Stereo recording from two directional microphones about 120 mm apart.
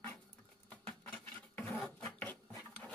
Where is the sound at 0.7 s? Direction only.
10° left (ahead or behind).